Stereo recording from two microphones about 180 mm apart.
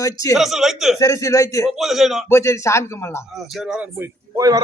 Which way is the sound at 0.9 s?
15° left (ahead or behind).